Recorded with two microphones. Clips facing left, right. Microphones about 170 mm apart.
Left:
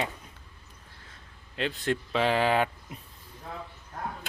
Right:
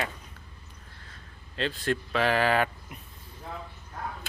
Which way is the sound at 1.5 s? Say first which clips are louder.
Even; 20° left (ahead or behind).